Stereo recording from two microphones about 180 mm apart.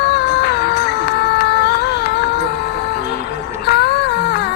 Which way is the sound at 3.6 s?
65° left (ahead or behind).